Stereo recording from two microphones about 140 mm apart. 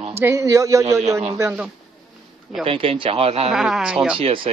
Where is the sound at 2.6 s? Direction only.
40° right (ahead or behind).